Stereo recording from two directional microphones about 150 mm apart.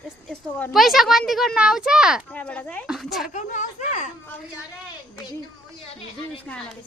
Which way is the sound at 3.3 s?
55° left (ahead or behind).